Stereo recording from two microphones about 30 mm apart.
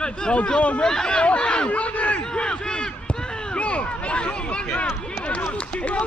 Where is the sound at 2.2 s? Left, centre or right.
Left.